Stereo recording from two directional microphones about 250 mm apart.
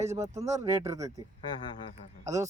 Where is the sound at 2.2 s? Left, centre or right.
Centre.